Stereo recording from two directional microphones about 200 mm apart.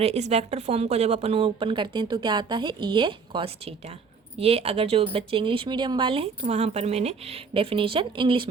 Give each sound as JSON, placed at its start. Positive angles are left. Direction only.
{"t": 0.0, "sound": "speech", "side_deg": -30}